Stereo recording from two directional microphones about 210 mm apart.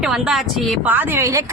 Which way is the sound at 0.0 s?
5° right (ahead or behind).